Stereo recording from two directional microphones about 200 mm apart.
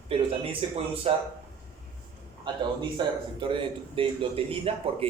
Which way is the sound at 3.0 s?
20° right (ahead or behind).